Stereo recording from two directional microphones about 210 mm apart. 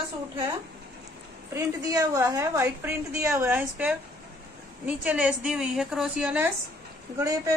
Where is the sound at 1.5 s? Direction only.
15° right (ahead or behind).